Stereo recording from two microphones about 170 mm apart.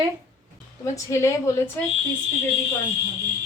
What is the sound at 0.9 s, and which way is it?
Speech, 15° left (ahead or behind).